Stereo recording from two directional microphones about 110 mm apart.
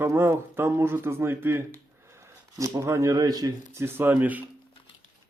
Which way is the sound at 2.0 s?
25° right (ahead or behind).